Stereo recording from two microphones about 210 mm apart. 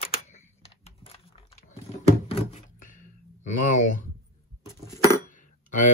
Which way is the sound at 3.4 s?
35° left (ahead or behind).